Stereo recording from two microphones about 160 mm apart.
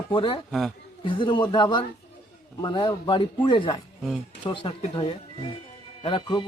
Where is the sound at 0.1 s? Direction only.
30° left (ahead or behind).